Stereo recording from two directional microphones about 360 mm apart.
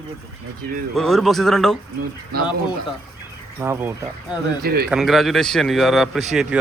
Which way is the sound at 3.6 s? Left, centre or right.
Centre.